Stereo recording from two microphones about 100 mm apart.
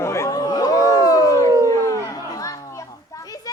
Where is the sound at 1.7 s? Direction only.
30° left (ahead or behind).